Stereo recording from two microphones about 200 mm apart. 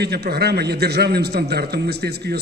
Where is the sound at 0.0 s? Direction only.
55° right (ahead or behind).